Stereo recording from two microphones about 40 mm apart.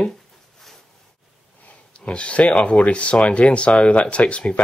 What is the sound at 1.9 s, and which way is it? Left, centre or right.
Speech, left.